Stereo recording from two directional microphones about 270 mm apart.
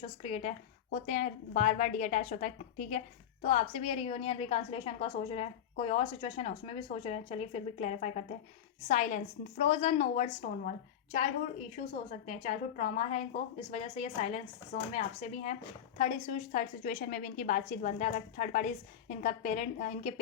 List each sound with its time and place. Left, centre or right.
0.0 s a woman's voice: left